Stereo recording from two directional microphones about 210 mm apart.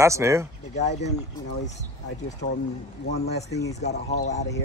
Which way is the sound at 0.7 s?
35° left (ahead or behind).